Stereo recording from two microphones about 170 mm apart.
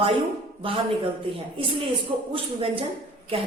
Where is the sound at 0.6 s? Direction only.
30° right (ahead or behind).